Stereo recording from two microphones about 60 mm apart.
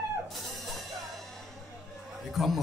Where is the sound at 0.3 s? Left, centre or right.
Centre.